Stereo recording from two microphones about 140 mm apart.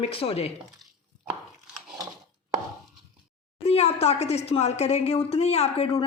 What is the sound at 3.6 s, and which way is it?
Speech, 50° left (ahead or behind).